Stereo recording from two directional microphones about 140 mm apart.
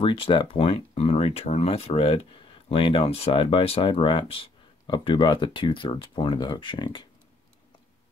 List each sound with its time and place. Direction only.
0.0 s speech: 40° left (ahead or behind)